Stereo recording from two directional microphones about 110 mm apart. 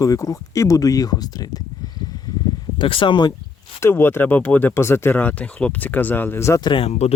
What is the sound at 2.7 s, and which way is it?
Speech, 50° left (ahead or behind).